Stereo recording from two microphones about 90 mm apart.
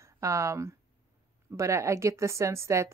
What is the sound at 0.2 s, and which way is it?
A woman's voice, 35° right (ahead or behind).